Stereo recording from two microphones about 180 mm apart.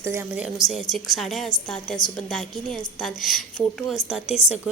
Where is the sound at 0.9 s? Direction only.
Centre (ahead or behind).